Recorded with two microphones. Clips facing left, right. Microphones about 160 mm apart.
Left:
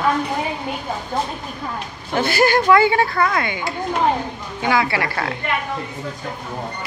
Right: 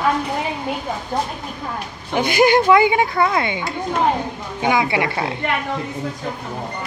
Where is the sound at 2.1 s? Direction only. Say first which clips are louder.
Right 2 dB; 15° right (ahead or behind).